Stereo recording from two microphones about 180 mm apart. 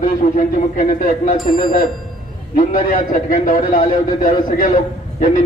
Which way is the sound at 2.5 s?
50° left (ahead or behind).